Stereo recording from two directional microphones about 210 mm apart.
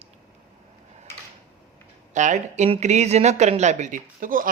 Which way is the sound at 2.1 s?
35° right (ahead or behind).